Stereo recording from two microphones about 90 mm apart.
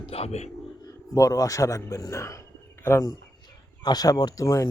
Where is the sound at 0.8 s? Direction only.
40° left (ahead or behind).